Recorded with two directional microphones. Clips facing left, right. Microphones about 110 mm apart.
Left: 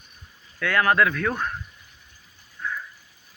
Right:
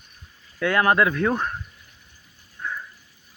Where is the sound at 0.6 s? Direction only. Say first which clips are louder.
Right 1 dB; 25° right (ahead or behind).